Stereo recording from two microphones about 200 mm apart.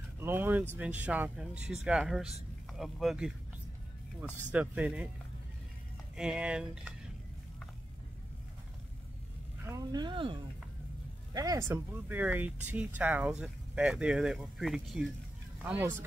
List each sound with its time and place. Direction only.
0.2 s speech: 10° right (ahead or behind)
4.5 s speech: 5° right (ahead or behind)
6.1 s speech: 5° right (ahead or behind)
9.7 s speech: 20° right (ahead or behind)